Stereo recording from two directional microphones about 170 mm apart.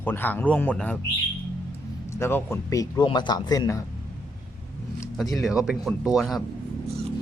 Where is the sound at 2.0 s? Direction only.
15° left (ahead or behind).